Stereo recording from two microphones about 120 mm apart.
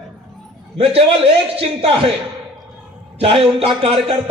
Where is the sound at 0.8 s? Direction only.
55° right (ahead or behind).